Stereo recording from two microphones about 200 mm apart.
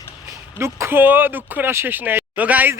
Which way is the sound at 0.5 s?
15° right (ahead or behind).